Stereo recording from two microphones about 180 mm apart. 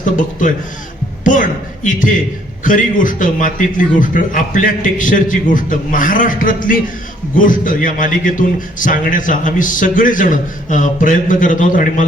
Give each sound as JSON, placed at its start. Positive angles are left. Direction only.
{"t": 0.0, "sound": "a man's voice", "side_deg": 45}